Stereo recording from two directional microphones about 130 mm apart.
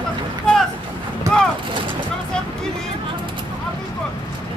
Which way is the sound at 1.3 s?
20° right (ahead or behind).